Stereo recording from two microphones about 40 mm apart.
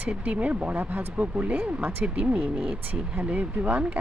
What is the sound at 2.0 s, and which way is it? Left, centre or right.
Speech, right.